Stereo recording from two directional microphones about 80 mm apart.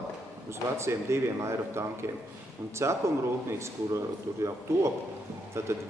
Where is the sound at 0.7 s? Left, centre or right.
Right.